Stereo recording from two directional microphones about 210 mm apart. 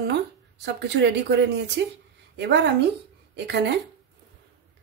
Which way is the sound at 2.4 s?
55° right (ahead or behind).